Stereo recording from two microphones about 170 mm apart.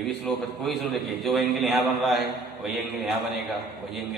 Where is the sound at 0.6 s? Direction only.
Centre (ahead or behind).